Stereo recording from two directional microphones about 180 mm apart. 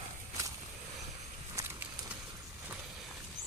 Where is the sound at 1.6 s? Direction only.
15° right (ahead or behind).